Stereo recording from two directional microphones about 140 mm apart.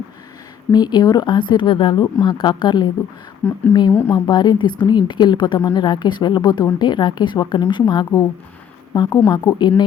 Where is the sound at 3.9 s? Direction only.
20° left (ahead or behind).